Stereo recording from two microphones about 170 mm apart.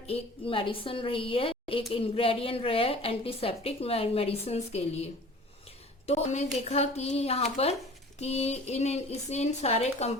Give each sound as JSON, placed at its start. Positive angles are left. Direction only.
{"t": 0.1, "sound": "a woman's voice", "side_deg": 30}
{"t": 6.1, "sound": "a woman's voice", "side_deg": 40}